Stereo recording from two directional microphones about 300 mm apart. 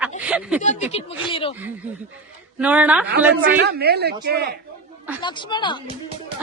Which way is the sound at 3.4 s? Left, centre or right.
Right.